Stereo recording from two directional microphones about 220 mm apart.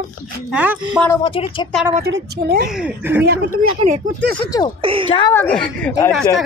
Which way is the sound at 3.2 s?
45° right (ahead or behind).